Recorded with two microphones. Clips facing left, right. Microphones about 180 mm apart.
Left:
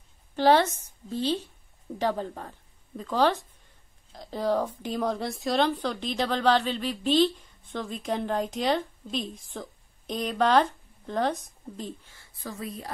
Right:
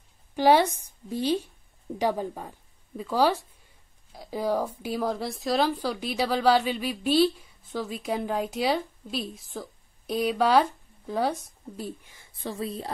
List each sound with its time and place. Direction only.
0.4 s a woman's voice: 10° right (ahead or behind)
12.4 s speech: 30° right (ahead or behind)